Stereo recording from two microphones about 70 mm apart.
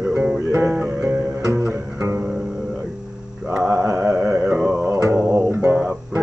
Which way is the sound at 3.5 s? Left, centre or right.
Right.